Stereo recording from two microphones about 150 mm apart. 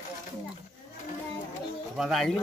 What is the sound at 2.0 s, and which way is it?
Speech, centre (ahead or behind).